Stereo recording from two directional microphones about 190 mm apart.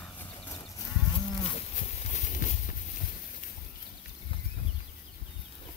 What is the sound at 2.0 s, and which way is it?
Clip-clop, 40° left (ahead or behind).